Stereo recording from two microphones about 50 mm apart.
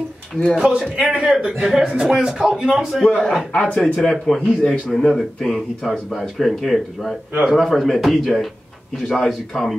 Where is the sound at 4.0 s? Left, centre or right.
Centre.